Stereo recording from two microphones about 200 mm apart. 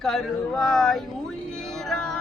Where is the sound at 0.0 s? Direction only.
Centre (ahead or behind).